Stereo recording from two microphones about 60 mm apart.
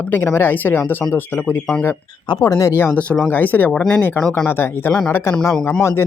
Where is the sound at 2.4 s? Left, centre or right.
Left.